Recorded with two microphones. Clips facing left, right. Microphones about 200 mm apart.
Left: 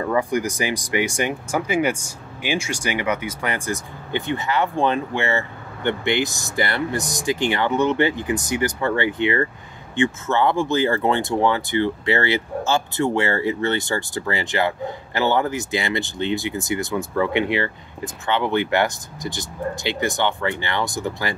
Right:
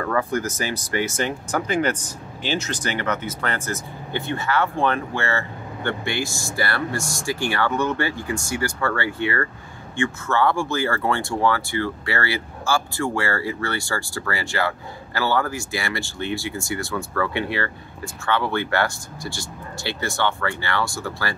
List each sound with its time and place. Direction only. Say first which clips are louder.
0.0 s speech: left 2 dB; 15° left (ahead or behind)